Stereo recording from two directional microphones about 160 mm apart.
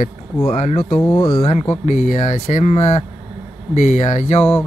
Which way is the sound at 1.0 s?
20° left (ahead or behind).